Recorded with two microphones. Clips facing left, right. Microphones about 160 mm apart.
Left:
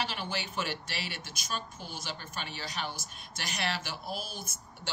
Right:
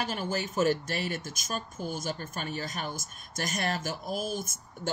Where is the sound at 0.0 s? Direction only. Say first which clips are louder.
Right 4 dB; 45° right (ahead or behind).